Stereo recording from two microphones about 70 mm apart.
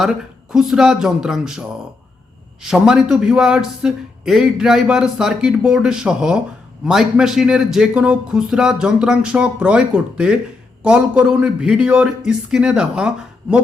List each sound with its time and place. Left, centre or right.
0.1 s speech: centre
2.9 s speech: centre